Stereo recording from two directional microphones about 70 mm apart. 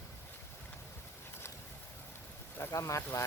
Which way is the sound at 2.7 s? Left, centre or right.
Left.